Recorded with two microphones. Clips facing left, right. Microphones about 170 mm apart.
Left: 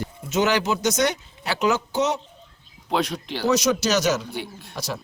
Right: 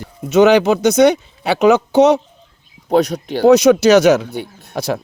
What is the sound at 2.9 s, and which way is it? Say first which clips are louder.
Speech: right 10 dB; 45° right (ahead or behind).